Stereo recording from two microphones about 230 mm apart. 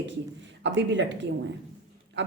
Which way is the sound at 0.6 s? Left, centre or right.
Right.